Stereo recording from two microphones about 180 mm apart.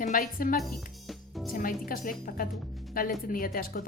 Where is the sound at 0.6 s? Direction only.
Centre (ahead or behind).